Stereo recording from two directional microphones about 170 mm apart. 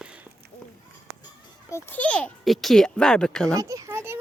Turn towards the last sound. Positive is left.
turn(degrees=-15)  # may be behind; listen again after turning